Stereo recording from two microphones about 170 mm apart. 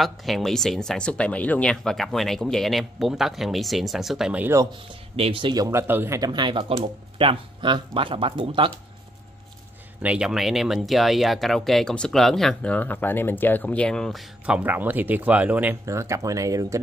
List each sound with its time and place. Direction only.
0.0 s speech: centre (ahead or behind)
5.1 s speech: 30° right (ahead or behind)
10.0 s speech: 5° right (ahead or behind)